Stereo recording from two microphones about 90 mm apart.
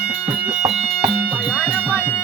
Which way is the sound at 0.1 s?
15° right (ahead or behind).